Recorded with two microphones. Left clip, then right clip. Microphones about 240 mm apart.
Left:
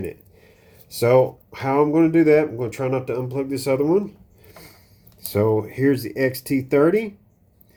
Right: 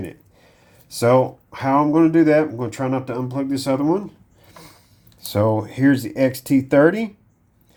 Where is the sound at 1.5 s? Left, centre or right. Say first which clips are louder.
Right 1 dB; right.